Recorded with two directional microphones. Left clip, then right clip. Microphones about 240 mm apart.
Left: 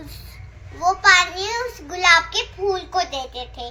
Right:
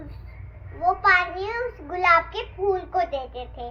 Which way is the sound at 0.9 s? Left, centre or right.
Centre.